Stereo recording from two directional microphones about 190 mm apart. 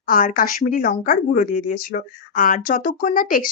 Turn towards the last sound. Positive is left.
turn(degrees=45)  # may be behind; listen again after turning